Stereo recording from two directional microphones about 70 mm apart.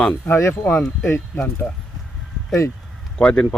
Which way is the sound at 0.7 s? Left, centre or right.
Left.